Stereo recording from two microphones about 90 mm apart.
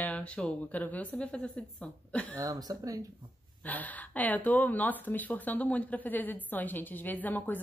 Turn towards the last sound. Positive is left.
turn(degrees=20)  # may be behind; listen again after turning